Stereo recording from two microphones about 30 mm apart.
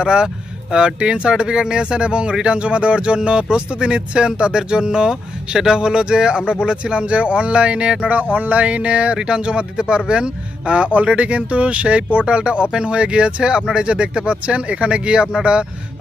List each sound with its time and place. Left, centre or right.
0.0 s speech: right
8.1 s speech: right